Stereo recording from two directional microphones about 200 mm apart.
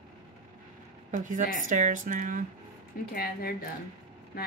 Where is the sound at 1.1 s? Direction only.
40° right (ahead or behind).